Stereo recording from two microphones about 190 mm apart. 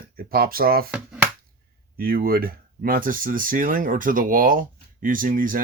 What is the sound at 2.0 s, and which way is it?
Speech, 50° right (ahead or behind).